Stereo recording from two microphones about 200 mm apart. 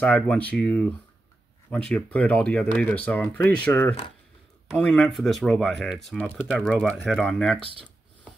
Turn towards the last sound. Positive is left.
turn(degrees=-25)  # may be behind; listen again after turning